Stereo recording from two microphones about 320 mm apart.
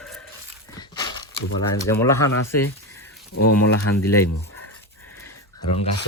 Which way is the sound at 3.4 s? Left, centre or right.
Left.